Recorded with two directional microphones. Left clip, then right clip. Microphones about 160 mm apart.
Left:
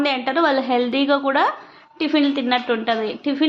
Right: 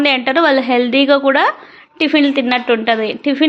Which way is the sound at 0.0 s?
25° right (ahead or behind).